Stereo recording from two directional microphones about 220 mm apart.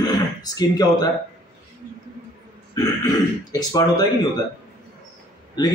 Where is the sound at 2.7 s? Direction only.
15° left (ahead or behind).